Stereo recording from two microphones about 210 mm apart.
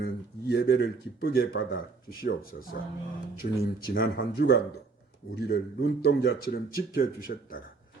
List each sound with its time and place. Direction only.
0.0 s speech: 50° left (ahead or behind)